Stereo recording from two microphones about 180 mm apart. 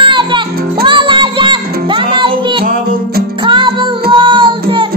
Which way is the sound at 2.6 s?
50° right (ahead or behind).